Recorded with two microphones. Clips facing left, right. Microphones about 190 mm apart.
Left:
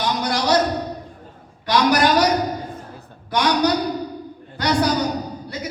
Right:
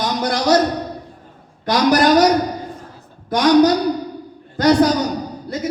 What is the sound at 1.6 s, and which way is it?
Speech, 40° right (ahead or behind).